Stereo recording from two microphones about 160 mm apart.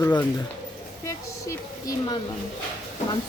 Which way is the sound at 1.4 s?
20° left (ahead or behind).